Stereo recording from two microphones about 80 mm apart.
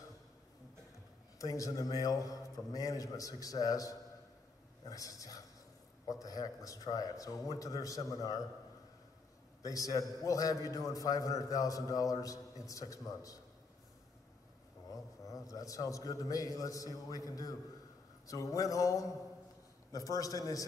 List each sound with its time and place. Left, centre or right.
1.4 s a man's voice: left
9.6 s a man's voice: left
15.2 s a man's voice: left